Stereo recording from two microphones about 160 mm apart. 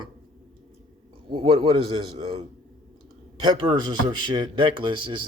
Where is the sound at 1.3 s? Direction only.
35° right (ahead or behind).